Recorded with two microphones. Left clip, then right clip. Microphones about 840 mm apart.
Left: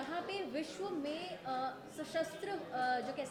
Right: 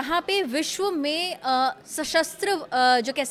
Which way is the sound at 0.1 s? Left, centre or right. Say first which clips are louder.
Right 19 dB; right.